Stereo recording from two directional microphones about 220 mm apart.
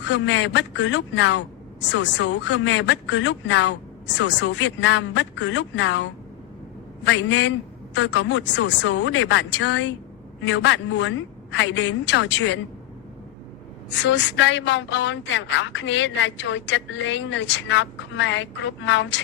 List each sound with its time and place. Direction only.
0.0 s a woman's voice: 55° left (ahead or behind)
13.9 s a woman's voice: 55° left (ahead or behind)